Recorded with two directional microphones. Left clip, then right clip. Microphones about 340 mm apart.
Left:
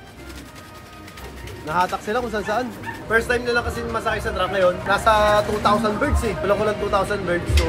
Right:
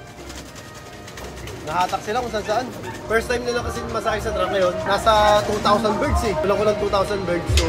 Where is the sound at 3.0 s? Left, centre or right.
Centre.